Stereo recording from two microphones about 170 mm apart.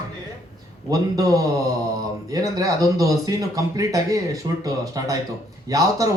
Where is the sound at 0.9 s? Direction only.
20° right (ahead or behind).